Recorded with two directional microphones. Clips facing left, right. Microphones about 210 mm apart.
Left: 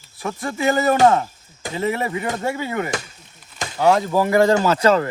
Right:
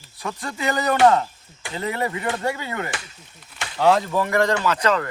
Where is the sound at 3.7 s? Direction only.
5° left (ahead or behind).